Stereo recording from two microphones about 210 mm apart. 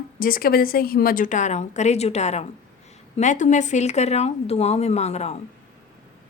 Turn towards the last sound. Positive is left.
turn(degrees=30)  # may be behind; listen again after turning